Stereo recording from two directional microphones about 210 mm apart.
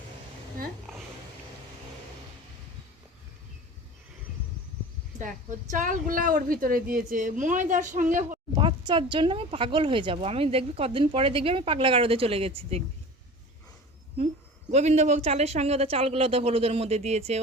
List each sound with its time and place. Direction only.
5.2 s a woman's voice: 40° right (ahead or behind)
8.9 s a woman's voice: 25° right (ahead or behind)
14.7 s a woman's voice: 35° right (ahead or behind)